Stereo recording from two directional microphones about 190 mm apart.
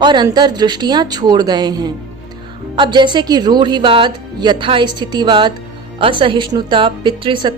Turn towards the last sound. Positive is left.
turn(degrees=-25)  # may be behind; listen again after turning